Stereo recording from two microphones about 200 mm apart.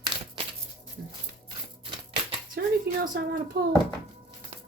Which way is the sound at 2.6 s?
55° right (ahead or behind).